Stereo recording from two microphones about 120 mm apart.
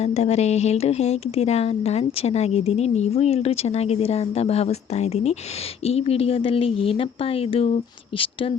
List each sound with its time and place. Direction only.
0.0 s speech: 65° left (ahead or behind); by 8.5 s 45° left (ahead or behind)